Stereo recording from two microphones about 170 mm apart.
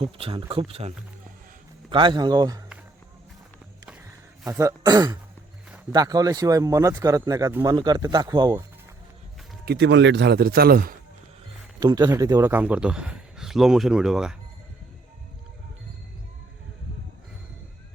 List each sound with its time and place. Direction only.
0.0 s speech: 35° right (ahead or behind)
4.4 s speech: 20° right (ahead or behind)
9.6 s speech: 80° right; by 10.9 s 60° right (ahead or behind)
11.8 s a man's voice: 25° right (ahead or behind); by 14.3 s 5° right (ahead or behind)